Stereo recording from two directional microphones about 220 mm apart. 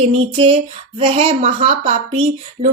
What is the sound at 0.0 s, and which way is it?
Speech, 25° right (ahead or behind).